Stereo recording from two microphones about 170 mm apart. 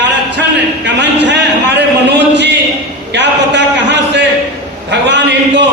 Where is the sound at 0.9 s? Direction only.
90° right.